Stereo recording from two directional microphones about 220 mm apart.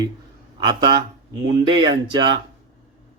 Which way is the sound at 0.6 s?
20° right (ahead or behind).